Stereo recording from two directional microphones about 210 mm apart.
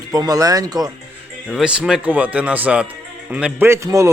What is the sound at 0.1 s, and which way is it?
Speech, 15° right (ahead or behind).